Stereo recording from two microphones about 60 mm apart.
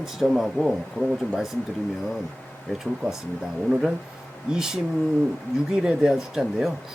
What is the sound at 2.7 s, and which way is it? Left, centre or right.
Speech, centre.